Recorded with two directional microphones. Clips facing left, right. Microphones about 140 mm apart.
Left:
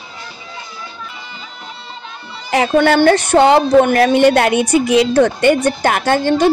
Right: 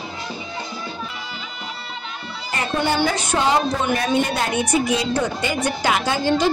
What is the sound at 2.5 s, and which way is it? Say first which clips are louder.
A woman's voice: left 10 dB; 80° left.